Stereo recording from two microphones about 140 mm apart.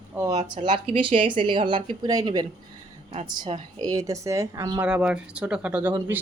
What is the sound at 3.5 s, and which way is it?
Speech, 45° right (ahead or behind).